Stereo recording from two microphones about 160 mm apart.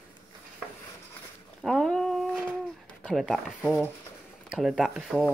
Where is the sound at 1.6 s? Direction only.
Centre (ahead or behind).